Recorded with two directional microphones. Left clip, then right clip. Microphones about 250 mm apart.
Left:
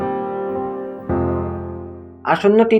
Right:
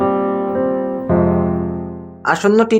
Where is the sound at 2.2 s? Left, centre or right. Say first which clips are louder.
Even; right.